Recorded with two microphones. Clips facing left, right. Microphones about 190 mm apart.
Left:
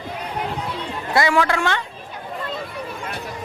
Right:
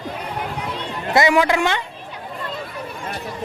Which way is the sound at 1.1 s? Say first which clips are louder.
Right 3 dB; 20° right (ahead or behind).